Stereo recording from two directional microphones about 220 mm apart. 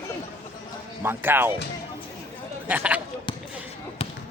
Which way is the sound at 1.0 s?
10° right (ahead or behind).